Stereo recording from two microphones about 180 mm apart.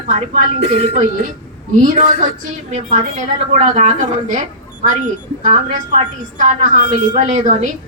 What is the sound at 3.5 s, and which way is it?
Speech, 40° right (ahead or behind).